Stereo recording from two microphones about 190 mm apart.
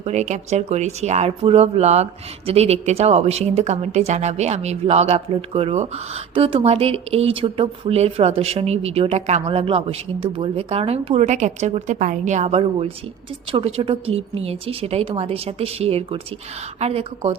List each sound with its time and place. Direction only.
0.0 s speech: 40° right (ahead or behind)